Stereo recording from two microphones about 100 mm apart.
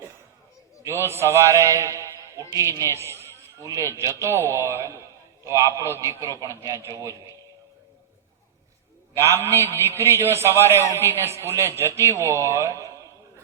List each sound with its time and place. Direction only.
0.8 s a man's voice: 25° right (ahead or behind)
9.1 s a man's voice: 25° right (ahead or behind)